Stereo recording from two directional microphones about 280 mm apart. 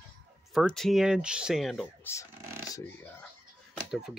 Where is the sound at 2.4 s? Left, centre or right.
Centre.